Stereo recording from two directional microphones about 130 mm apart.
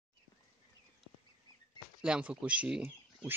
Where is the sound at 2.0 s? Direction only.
5° right (ahead or behind).